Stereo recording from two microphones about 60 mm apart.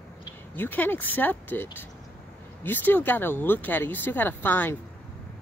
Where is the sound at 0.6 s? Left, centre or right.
Left.